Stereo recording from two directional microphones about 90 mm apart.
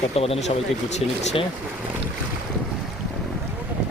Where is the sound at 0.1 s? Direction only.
90° left.